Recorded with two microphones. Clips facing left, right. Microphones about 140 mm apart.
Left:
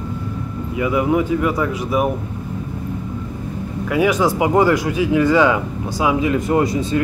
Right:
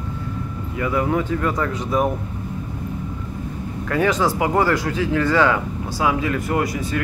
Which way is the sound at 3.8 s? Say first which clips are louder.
Left 3 dB; 10° left (ahead or behind).